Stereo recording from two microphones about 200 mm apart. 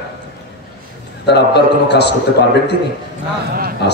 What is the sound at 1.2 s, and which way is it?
Speech, 55° left (ahead or behind).